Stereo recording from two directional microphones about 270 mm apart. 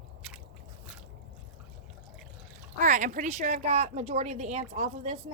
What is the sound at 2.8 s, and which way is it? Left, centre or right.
A woman's voice, right.